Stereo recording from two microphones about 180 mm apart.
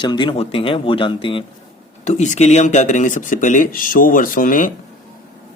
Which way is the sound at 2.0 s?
40° left (ahead or behind).